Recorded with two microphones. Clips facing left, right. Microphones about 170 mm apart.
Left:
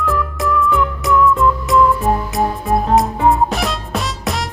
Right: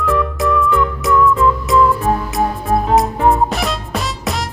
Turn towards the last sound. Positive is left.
turn(degrees=0)  # may be behind; listen again after turning